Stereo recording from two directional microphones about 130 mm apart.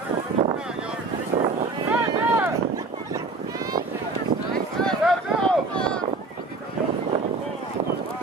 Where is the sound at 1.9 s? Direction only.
15° right (ahead or behind).